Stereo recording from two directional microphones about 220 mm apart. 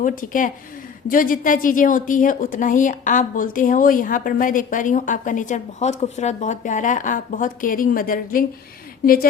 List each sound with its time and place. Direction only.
0.0 s a woman's voice: 35° left (ahead or behind)